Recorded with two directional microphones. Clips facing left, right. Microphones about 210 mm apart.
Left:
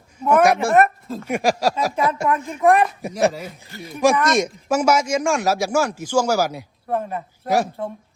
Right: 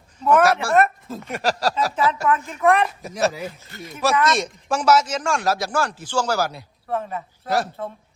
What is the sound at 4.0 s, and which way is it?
Speech, 15° left (ahead or behind).